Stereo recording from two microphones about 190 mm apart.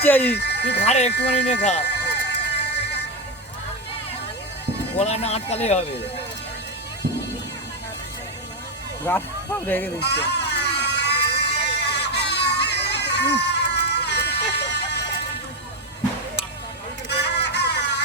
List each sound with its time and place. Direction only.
0.0 s speech: 10° left (ahead or behind)
0.3 s speech: 65° left (ahead or behind)
0.9 s speech: 35° left (ahead or behind)
1.1 s speech: 65° left (ahead or behind)
1.8 s music: 60° left (ahead or behind)
4.9 s speech: 35° left (ahead or behind)
9.6 s speech: 10° left (ahead or behind)
10.0 s a sound: 60° left (ahead or behind)
17.1 s a sound: 60° left (ahead or behind)